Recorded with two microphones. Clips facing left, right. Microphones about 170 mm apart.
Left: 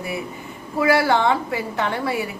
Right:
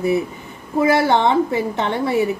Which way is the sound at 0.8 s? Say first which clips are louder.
Right 2 dB; 20° right (ahead or behind).